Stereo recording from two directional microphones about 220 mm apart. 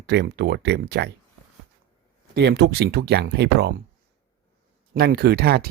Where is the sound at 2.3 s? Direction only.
50° right (ahead or behind).